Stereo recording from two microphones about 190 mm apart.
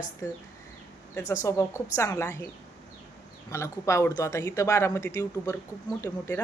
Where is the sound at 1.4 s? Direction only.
15° left (ahead or behind).